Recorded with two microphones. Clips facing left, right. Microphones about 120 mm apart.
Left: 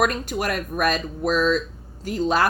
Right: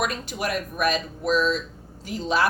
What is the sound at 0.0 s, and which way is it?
Speech, 45° left (ahead or behind).